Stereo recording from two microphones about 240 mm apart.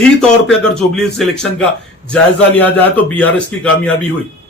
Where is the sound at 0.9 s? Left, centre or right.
Centre.